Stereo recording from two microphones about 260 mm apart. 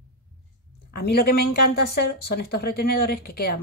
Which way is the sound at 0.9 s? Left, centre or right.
Left.